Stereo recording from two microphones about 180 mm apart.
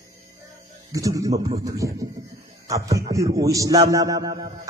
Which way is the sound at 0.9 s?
20° right (ahead or behind).